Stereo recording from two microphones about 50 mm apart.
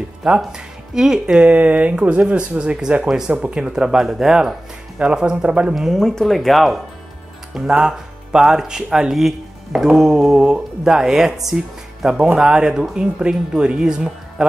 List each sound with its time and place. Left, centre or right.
0.5 s speech: centre
1.2 s speech: right
3.0 s speech: centre
5.8 s speech: centre
7.5 s speech: centre